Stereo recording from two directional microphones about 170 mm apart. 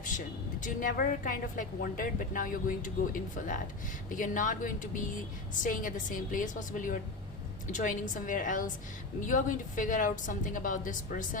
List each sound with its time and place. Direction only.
0.6 s a woman's voice: 55° left (ahead or behind)